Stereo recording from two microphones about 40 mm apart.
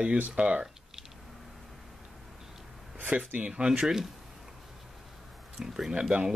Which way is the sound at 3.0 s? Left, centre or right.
Right.